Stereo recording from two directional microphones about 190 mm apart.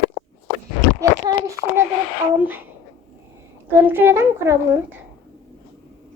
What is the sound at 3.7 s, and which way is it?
Speech, 10° right (ahead or behind).